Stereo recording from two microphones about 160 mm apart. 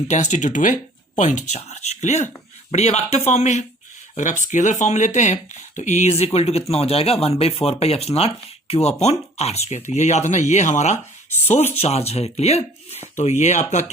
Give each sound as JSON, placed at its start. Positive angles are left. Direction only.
{"t": 0.1, "sound": "speech", "side_deg": 45}